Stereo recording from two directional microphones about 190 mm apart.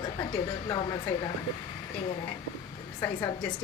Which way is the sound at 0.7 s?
25° left (ahead or behind).